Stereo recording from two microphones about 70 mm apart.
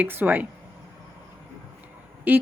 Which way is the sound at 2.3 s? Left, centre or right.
Right.